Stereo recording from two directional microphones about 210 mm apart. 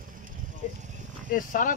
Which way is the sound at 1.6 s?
40° left (ahead or behind).